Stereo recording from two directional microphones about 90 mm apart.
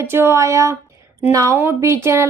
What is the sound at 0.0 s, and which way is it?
Speech, 30° right (ahead or behind).